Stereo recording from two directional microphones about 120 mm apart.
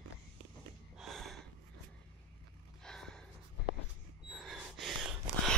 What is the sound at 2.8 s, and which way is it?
Gasp, 5° left (ahead or behind).